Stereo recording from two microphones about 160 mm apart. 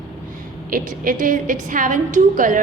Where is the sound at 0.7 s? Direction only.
60° right (ahead or behind).